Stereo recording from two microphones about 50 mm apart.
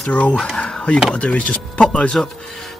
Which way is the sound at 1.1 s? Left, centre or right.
Left.